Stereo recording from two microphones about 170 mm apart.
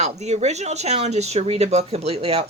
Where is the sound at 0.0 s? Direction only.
40° right (ahead or behind).